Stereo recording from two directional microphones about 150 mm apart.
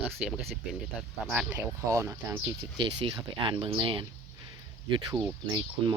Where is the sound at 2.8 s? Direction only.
35° right (ahead or behind).